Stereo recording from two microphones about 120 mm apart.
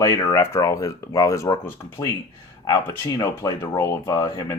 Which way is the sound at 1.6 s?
20° left (ahead or behind).